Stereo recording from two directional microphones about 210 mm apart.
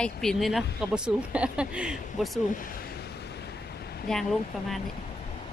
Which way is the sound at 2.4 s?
40° left (ahead or behind).